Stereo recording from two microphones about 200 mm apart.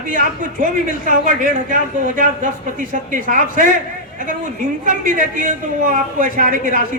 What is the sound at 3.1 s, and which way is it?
Speech, 40° right (ahead or behind).